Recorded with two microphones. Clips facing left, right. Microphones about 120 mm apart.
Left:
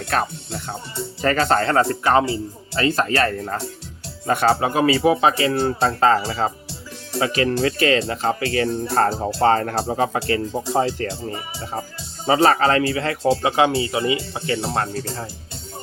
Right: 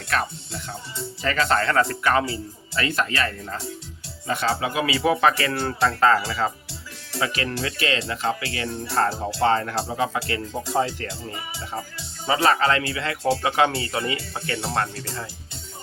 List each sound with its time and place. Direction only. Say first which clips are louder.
0.2 s speech: left 4 dB; 55° left (ahead or behind)
1.2 s speech: left 5 dB; 40° left (ahead or behind)
1.5 s speech: left 1 dB; 30° left (ahead or behind)
4.9 s speech: left 3 dB; 25° left (ahead or behind)
8.9 s speech: left 1 dB; 45° left (ahead or behind)
9.1 s speech: left 3 dB; 25° left (ahead or behind)
9.5 s speech: left 4 dB; 40° left (ahead or behind)
9.7 s speech: left 4 dB; 30° left (ahead or behind)